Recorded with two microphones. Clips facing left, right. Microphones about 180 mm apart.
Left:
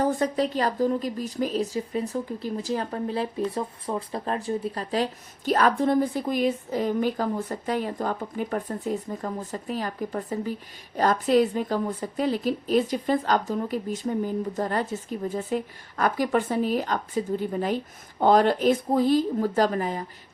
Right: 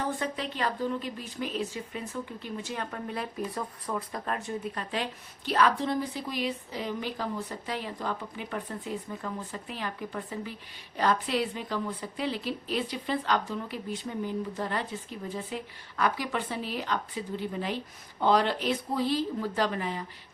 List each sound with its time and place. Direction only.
0.0 s a woman's voice: 40° left (ahead or behind)